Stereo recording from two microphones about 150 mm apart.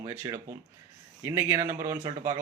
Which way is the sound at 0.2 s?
25° right (ahead or behind).